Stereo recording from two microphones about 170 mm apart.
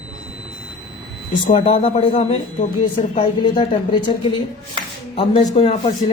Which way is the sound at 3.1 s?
30° left (ahead or behind).